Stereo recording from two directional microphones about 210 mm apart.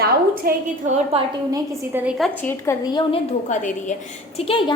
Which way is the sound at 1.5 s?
5° right (ahead or behind).